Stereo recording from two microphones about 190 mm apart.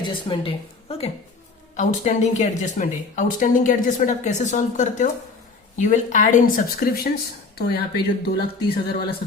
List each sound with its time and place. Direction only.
0.0 s a woman's voice: 25° left (ahead or behind); by 8.4 s 55° left (ahead or behind)